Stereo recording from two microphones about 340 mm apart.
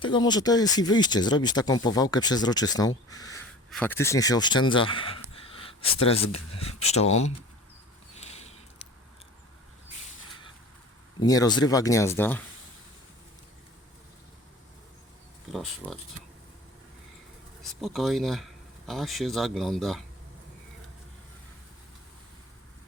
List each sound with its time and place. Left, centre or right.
0.0 s speech: centre
8.1 s a sound: centre
11.2 s speech: centre
15.5 s speech: centre
17.6 s speech: centre